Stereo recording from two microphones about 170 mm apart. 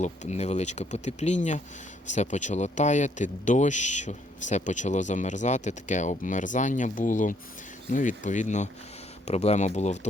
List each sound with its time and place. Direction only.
0.0 s speech: 40° left (ahead or behind)